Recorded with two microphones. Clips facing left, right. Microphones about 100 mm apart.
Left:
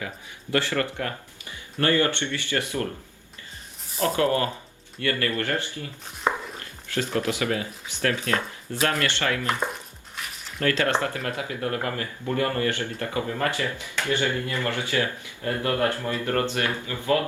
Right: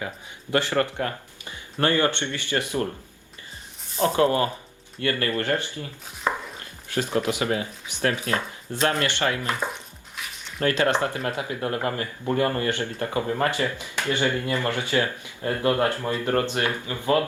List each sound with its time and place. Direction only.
0.5 s speech: 25° right (ahead or behind)
4.0 s speech: 25° right (ahead or behind)
6.3 s dog: 15° left (ahead or behind)
6.9 s speech: 20° right (ahead or behind)
9.7 s dog: centre (ahead or behind)
10.6 s speech: 20° right (ahead or behind)